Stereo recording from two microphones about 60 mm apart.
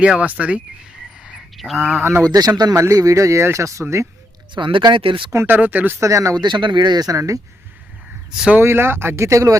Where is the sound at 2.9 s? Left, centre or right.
Right.